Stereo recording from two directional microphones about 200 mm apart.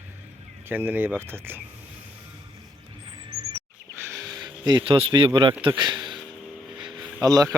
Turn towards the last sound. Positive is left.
turn(degrees=-15)  # may be behind; listen again after turning